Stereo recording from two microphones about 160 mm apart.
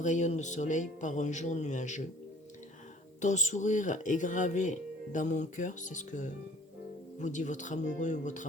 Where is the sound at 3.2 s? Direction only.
50° left (ahead or behind).